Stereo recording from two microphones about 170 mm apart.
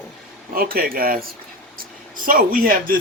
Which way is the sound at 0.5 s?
60° right (ahead or behind).